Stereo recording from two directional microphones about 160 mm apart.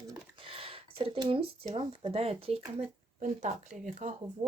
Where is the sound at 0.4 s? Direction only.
35° right (ahead or behind).